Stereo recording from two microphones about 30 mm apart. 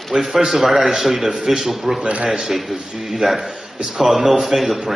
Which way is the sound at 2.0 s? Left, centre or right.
Right.